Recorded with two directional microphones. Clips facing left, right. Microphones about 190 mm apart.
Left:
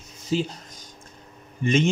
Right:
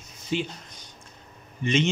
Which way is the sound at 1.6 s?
45° left (ahead or behind).